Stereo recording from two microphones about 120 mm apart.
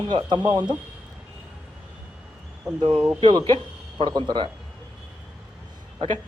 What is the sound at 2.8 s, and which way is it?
Speech, 40° right (ahead or behind).